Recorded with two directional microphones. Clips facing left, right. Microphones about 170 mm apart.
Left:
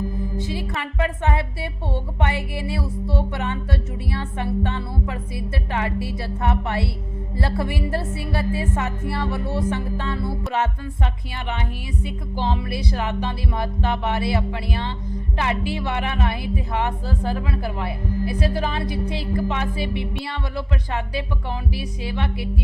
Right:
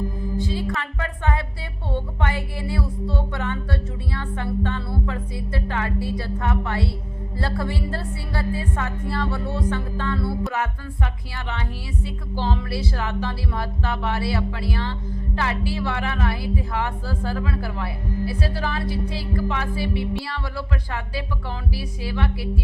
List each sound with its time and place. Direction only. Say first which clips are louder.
0.7 s a woman's voice: left 3 dB; 20° left (ahead or behind)